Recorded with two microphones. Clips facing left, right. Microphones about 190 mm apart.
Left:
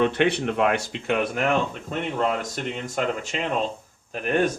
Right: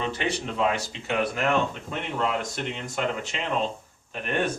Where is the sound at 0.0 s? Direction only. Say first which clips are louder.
Left 8 dB; 60° left (ahead or behind).